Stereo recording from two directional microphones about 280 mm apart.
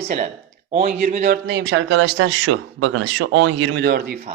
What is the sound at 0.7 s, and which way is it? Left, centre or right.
Speech, right.